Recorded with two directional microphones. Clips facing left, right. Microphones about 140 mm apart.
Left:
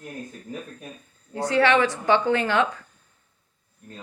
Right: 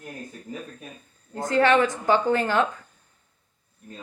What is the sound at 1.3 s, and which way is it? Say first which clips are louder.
Speech: even; 45° right (ahead or behind).